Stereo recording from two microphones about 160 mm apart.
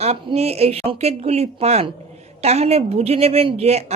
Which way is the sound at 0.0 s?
40° right (ahead or behind).